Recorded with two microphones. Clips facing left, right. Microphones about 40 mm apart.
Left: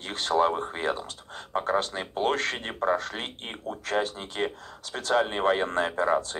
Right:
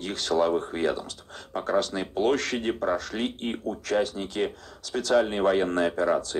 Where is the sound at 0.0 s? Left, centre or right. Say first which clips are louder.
Even; left.